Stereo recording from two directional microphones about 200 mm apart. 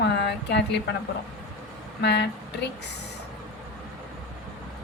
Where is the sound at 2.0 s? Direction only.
60° left (ahead or behind).